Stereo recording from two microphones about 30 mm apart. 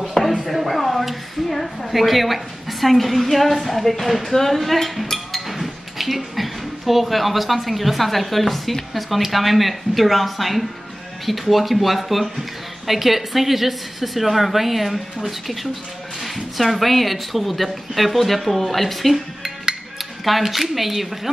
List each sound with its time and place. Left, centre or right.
0.0 s a sound: centre
0.5 s a woman's voice: centre
5.1 s chink: centre
8.9 s speech: centre
20.4 s speech: centre